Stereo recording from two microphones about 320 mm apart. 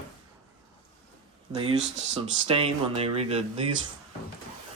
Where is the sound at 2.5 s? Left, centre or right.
Centre.